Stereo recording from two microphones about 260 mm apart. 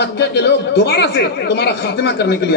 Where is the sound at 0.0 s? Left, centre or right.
Left.